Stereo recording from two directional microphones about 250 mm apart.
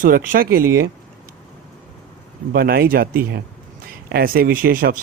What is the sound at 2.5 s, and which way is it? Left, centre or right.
Speech, right.